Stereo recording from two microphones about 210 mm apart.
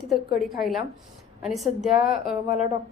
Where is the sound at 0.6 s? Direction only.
Centre (ahead or behind).